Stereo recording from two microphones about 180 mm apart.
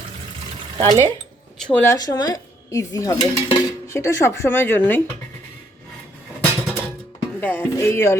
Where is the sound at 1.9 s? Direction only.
20° left (ahead or behind).